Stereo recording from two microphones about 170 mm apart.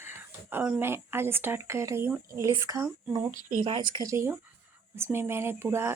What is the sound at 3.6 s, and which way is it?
Speech, 30° right (ahead or behind).